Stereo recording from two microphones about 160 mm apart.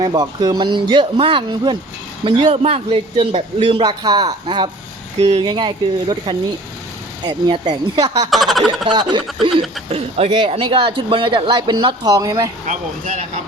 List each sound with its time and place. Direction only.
0.0 s a man's voice: 25° right (ahead or behind)
5.2 s a man's voice: 40° right (ahead or behind)
5.5 s speech: 30° right (ahead or behind)
8.3 s speech: centre (ahead or behind)
8.9 s speech: 30° right (ahead or behind)
9.9 s a man's voice: 40° right (ahead or behind); by 12.5 s 20° right (ahead or behind)